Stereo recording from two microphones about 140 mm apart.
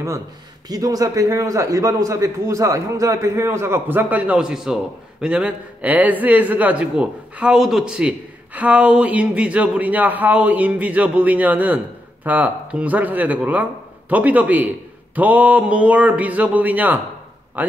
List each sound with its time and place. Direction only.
0.7 s a man's voice: 25° right (ahead or behind)